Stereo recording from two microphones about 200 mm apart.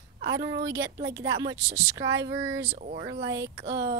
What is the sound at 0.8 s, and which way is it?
Speech, 55° right (ahead or behind).